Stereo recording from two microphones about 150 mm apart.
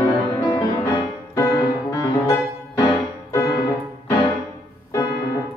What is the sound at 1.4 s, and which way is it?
Music, 25° left (ahead or behind).